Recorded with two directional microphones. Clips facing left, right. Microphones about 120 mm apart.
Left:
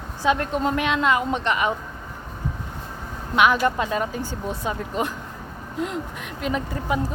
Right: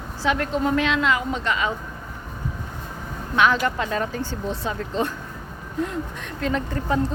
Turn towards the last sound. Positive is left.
turn(degrees=10)  # may be behind; listen again after turning